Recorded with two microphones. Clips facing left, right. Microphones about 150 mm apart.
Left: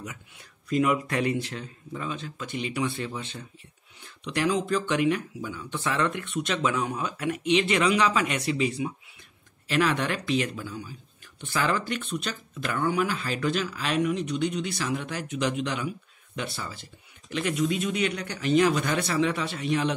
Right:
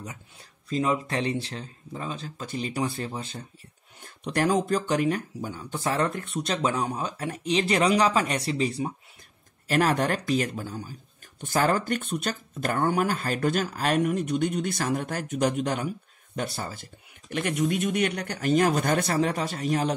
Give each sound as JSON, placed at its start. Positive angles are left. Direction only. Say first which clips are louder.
{"t": 0.7, "sound": "speech", "louder": "left 2 dB", "side_deg": -30}